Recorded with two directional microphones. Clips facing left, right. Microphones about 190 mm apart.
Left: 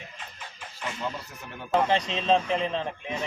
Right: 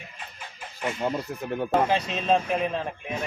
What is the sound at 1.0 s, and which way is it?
Speech, 55° right (ahead or behind).